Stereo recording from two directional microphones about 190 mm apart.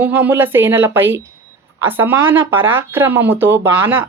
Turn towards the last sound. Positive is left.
turn(degrees=-10)  # may be behind; listen again after turning